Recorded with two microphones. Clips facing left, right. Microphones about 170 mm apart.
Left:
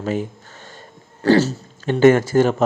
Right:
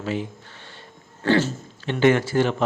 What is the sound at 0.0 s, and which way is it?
Speech, 45° left (ahead or behind).